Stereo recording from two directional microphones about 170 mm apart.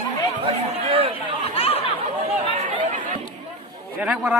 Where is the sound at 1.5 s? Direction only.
35° left (ahead or behind).